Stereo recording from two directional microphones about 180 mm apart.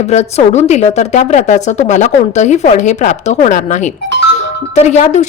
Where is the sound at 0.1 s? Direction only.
40° left (ahead or behind).